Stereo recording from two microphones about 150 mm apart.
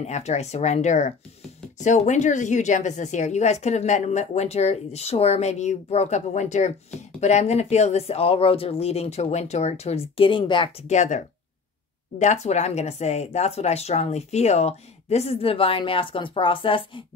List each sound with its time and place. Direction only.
0.0 s a woman's voice: 50° left (ahead or behind)
10.9 s a woman's voice: 50° left (ahead or behind); by 17.0 s 35° left (ahead or behind)